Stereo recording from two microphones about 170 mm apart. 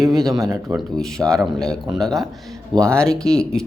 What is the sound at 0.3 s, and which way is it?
Speech, 20° right (ahead or behind).